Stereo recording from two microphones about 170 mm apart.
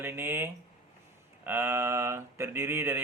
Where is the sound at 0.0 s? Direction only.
15° right (ahead or behind).